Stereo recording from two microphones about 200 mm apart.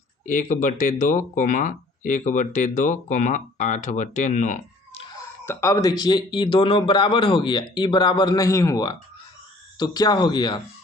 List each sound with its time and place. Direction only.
0.3 s speech: 40° left (ahead or behind)
5.5 s speech: 15° left (ahead or behind)